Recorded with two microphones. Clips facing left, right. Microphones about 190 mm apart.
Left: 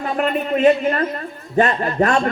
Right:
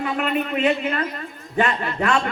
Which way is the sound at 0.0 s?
40° left (ahead or behind).